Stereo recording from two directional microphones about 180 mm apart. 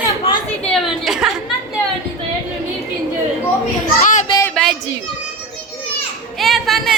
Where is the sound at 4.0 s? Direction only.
45° left (ahead or behind).